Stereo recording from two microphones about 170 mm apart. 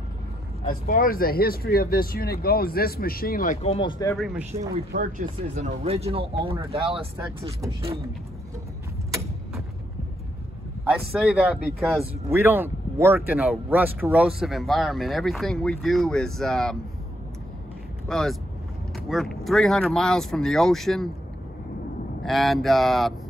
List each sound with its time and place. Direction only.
0.7 s speech: 55° left (ahead or behind)
3.6 s speech: 30° left (ahead or behind)
4.2 s speech: 5° right (ahead or behind)
4.9 s speech: 50° right (ahead or behind); by 7.5 s 35° right (ahead or behind)
10.9 s speech: centre (ahead or behind)
12.3 s speech: 15° right (ahead or behind); by 16.7 s centre (ahead or behind)
18.0 s speech: centre (ahead or behind)
22.2 s speech: centre (ahead or behind)